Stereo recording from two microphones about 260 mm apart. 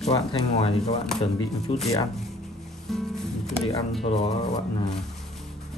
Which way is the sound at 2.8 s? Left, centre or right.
Centre.